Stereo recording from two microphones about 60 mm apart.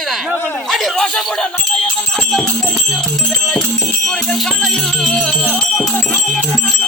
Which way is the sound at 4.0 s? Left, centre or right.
Centre.